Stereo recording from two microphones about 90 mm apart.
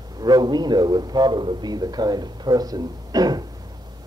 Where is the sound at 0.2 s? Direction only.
50° right (ahead or behind).